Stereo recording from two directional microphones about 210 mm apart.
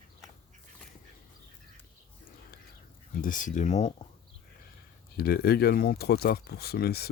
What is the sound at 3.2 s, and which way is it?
Speech, 40° left (ahead or behind).